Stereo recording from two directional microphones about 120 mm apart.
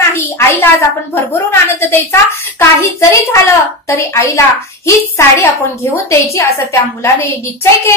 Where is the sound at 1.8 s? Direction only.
20° left (ahead or behind).